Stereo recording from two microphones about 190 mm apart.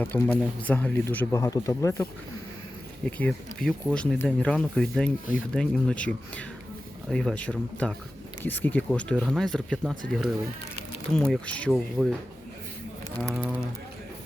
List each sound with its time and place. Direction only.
0.0 s speech: 10° left (ahead or behind)
11.1 s speech: 5° left (ahead or behind)
13.3 s speech: 5° right (ahead or behind)